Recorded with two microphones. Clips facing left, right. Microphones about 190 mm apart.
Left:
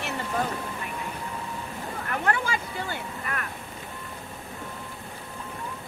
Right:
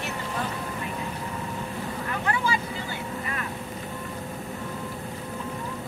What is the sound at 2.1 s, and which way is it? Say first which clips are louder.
Vehicle: left 1 dB; 55° left (ahead or behind).